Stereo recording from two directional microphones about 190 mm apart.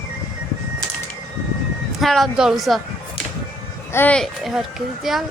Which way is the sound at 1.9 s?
Centre (ahead or behind).